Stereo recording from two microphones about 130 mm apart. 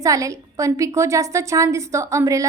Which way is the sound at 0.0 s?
25° right (ahead or behind).